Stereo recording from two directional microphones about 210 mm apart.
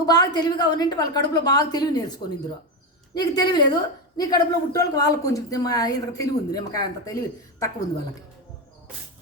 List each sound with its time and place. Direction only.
0.0 s a woman's voice: 20° left (ahead or behind)